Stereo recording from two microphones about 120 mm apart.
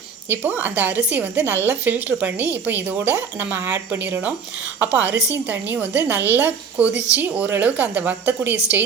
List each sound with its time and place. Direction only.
0.3 s speech: 15° right (ahead or behind)